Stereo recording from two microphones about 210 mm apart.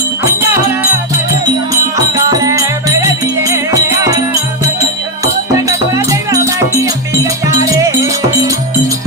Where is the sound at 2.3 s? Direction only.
15° right (ahead or behind).